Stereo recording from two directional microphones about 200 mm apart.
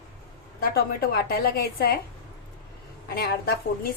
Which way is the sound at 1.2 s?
50° left (ahead or behind).